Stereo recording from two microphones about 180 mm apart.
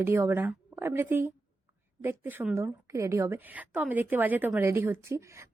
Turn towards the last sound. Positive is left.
turn(degrees=-15)  # may be behind; listen again after turning